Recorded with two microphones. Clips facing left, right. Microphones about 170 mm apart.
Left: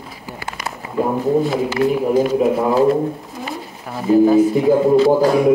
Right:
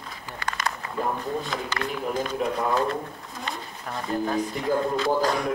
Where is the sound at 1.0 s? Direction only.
5° left (ahead or behind).